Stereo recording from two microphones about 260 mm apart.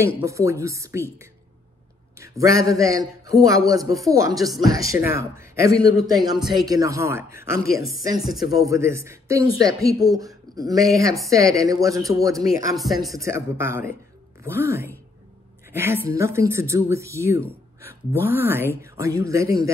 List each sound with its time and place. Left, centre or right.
0.0 s a man's voice: centre
2.1 s a man's voice: centre
7.6 s a woman's voice: left
8.5 s a man's voice: centre